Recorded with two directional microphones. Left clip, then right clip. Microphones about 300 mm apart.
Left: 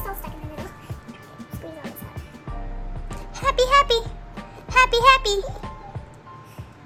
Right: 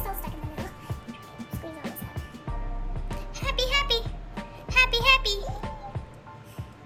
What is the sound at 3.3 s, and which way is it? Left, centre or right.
Music, centre.